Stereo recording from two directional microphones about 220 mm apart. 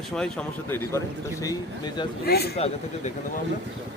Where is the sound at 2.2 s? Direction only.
45° left (ahead or behind).